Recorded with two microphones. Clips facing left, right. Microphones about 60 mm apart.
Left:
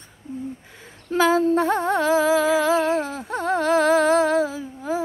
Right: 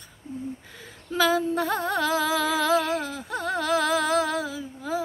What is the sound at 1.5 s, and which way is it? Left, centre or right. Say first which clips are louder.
Music: left 5 dB; left.